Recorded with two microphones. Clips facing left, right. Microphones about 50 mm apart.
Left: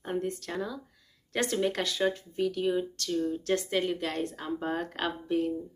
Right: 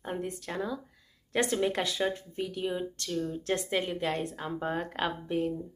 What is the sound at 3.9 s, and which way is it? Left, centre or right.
Speech, right.